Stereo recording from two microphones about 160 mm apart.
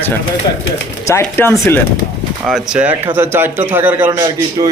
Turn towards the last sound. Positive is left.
turn(degrees=-25)  # may be behind; listen again after turning